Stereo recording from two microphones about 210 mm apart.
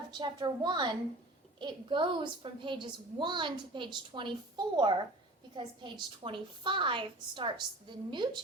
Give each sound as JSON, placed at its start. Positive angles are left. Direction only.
{"t": 0.1, "sound": "a woman's voice", "side_deg": -20}